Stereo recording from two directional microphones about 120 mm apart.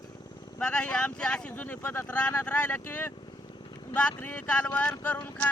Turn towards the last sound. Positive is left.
turn(degrees=15)  # may be behind; listen again after turning